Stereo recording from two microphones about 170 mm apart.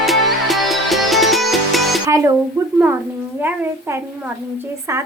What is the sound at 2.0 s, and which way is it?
A woman's voice, 20° right (ahead or behind).